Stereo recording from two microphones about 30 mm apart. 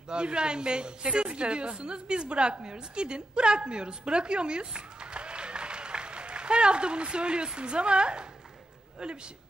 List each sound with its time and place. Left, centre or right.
0.1 s a woman's voice: right